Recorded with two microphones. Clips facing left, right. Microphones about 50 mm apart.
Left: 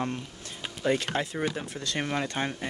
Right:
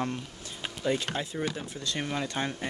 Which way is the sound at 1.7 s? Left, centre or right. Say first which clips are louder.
Left 2 dB; left.